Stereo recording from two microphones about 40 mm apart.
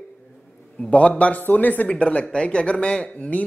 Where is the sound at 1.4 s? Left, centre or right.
Left.